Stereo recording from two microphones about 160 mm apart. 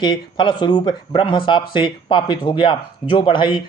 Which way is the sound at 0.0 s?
30° left (ahead or behind).